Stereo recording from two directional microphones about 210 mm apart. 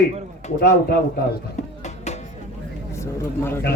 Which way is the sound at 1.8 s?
35° left (ahead or behind).